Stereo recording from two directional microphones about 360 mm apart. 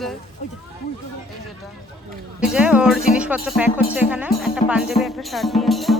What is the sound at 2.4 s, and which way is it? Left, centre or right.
Speech, centre.